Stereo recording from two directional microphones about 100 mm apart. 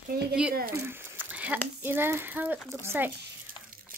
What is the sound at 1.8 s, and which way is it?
Speech, 20° right (ahead or behind).